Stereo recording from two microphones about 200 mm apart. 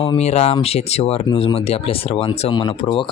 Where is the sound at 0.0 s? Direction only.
30° left (ahead or behind).